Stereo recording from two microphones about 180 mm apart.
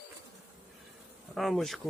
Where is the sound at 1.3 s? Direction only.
Centre (ahead or behind).